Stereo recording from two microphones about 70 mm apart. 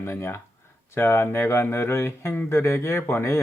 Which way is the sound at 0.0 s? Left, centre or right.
Left.